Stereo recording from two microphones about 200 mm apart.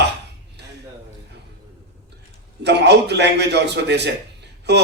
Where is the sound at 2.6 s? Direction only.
60° right (ahead or behind).